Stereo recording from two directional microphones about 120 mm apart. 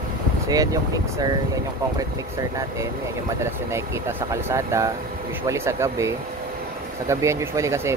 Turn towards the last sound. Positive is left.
turn(degrees=-25)  # may be behind; listen again after turning